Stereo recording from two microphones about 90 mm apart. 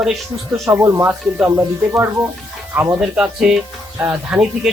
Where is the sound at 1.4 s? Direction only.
25° right (ahead or behind).